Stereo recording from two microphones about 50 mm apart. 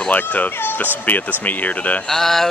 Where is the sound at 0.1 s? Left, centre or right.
Left.